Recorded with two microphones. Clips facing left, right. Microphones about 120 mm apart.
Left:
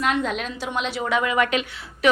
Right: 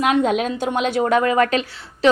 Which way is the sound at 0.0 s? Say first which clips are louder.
Right 6 dB; 50° right (ahead or behind).